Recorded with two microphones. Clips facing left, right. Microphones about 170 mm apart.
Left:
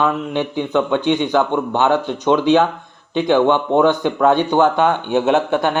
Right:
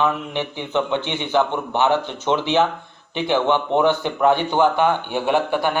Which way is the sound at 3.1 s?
15° left (ahead or behind).